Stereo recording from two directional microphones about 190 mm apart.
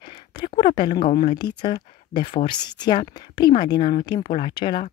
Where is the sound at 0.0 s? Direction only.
25° left (ahead or behind).